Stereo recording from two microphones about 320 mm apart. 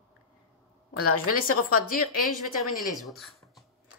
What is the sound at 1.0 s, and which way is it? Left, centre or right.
Speech, left.